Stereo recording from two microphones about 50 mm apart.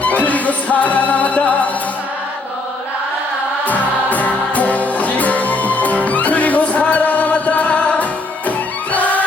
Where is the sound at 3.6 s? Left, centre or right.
Left.